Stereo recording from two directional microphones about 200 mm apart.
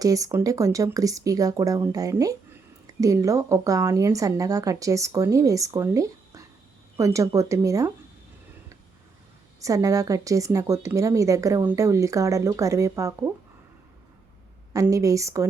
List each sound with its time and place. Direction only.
0.0 s a woman's voice: 15° right (ahead or behind)
9.6 s a woman's voice: 15° right (ahead or behind)
14.7 s a woman's voice: 15° right (ahead or behind)